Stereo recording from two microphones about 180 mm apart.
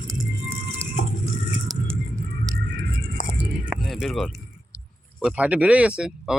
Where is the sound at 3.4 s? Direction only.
5° right (ahead or behind).